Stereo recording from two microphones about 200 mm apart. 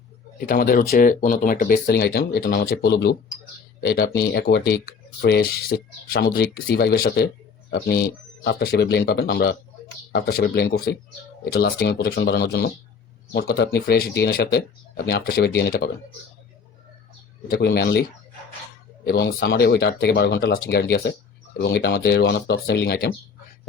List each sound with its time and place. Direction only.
0.3 s speech: 45° left (ahead or behind)
17.5 s speech: 50° left (ahead or behind)
19.0 s speech: 50° left (ahead or behind)